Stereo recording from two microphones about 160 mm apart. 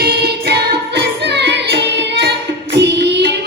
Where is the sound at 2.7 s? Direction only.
90° right.